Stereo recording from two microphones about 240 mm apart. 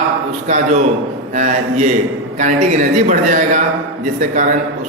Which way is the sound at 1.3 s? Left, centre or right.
Right.